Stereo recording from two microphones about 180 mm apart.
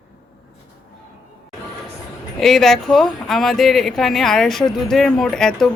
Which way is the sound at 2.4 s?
Centre (ahead or behind).